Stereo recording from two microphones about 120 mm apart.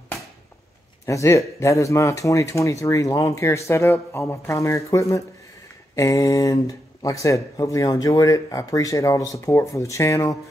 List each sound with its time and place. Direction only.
1.0 s speech: 25° left (ahead or behind)